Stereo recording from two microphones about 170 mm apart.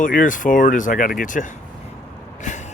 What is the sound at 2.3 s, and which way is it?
Vehicle, 45° left (ahead or behind).